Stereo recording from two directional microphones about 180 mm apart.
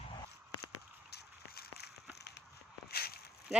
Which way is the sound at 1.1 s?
65° left (ahead or behind).